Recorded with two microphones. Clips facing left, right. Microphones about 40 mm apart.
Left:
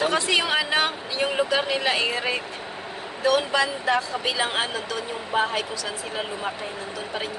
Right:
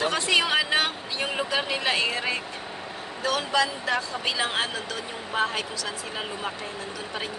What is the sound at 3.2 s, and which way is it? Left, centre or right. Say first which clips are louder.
Speech: left 3 dB; left.